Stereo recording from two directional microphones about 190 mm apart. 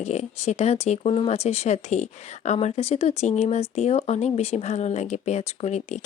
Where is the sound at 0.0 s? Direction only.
35° left (ahead or behind).